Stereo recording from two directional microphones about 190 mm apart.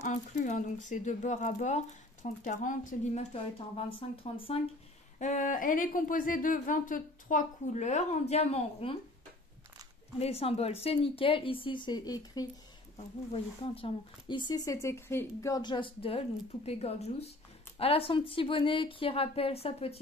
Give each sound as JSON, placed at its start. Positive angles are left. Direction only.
{"t": 0.0, "sound": "speech", "side_deg": 40}
{"t": 3.7, "sound": "speech", "side_deg": 30}
{"t": 5.2, "sound": "speech", "side_deg": 40}
{"t": 10.1, "sound": "speech", "side_deg": 30}